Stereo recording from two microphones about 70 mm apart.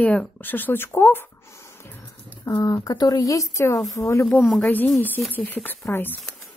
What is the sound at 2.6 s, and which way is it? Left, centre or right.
Speech, left.